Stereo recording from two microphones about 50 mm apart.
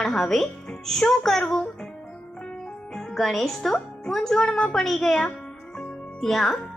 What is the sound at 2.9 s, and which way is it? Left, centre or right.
A child's voice, centre.